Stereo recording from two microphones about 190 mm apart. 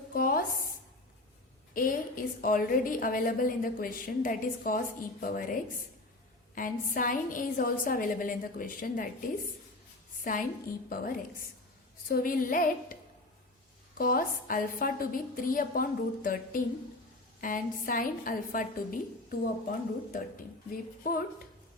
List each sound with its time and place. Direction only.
0.1 s a sound: 50° left (ahead or behind)
1.7 s a woman's voice: 45° left (ahead or behind)
10.2 s a woman's voice: 45° left (ahead or behind)
14.0 s a woman's voice: 50° left (ahead or behind)